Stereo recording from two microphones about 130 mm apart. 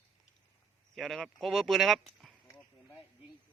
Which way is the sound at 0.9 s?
Centre (ahead or behind).